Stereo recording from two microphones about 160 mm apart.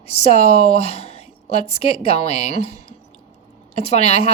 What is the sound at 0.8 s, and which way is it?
A woman's voice, 40° left (ahead or behind).